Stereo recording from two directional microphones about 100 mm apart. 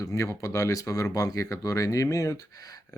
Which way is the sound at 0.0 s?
35° left (ahead or behind).